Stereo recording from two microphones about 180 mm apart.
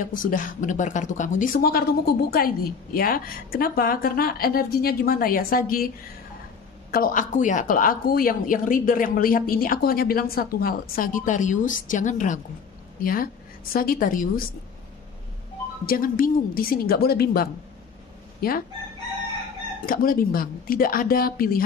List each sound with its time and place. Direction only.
0.0 s speech: 50° left (ahead or behind)
6.9 s speech: 50° left (ahead or behind)
15.8 s a woman's voice: 55° left (ahead or behind)
19.9 s speech: 50° left (ahead or behind)